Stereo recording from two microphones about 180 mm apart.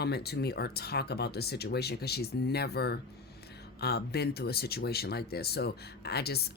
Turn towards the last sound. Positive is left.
turn(degrees=60)  # may be behind; listen again after turning